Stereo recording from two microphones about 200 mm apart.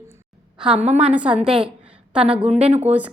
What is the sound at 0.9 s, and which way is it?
A woman's voice, 5° right (ahead or behind).